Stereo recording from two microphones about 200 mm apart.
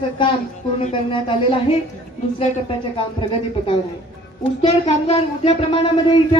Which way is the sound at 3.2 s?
25° left (ahead or behind).